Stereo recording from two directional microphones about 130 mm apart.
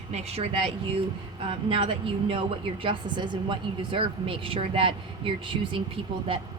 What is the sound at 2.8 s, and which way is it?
A woman's voice, 40° right (ahead or behind).